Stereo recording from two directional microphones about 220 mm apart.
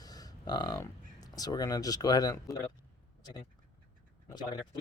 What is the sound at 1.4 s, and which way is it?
Speech, 15° left (ahead or behind).